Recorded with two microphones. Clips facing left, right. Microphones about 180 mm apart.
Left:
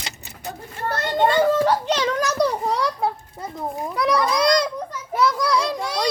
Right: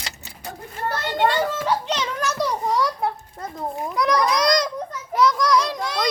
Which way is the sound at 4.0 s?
30° left (ahead or behind).